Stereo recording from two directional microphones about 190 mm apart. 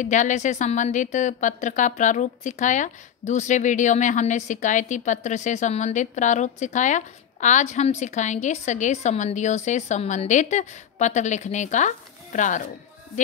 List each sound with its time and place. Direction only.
0.0 s a woman's voice: 40° left (ahead or behind)